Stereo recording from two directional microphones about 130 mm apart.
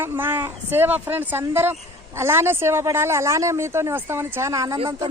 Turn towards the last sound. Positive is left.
turn(degrees=-25)  # may be behind; listen again after turning